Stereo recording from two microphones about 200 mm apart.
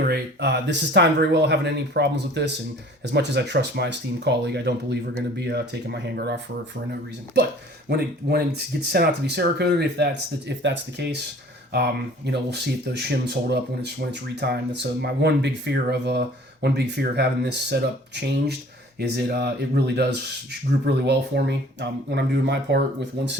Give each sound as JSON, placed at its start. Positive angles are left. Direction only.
{"t": 0.0, "sound": "speech", "side_deg": -55}
{"t": 7.9, "sound": "speech", "side_deg": -50}